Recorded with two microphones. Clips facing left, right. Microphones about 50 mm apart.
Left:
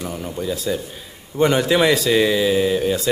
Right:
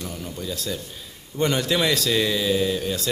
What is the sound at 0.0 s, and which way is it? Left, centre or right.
Speech, centre.